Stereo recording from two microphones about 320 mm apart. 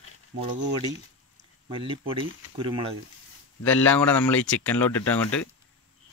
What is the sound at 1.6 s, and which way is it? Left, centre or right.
Speech, centre.